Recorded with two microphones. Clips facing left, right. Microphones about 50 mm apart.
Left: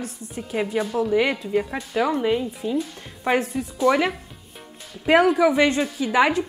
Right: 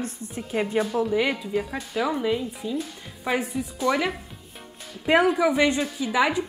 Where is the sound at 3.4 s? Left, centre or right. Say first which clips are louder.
Left 5 dB; centre.